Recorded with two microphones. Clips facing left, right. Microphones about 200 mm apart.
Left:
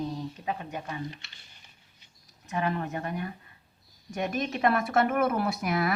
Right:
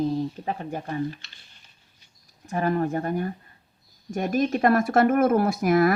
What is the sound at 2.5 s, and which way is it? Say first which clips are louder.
A woman's voice: right 6 dB; 45° right (ahead or behind).